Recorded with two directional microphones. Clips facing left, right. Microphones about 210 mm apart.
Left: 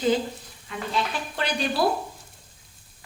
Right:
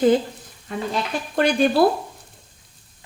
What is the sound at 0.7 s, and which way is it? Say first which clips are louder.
A woman's voice: right 3 dB; 45° right (ahead or behind).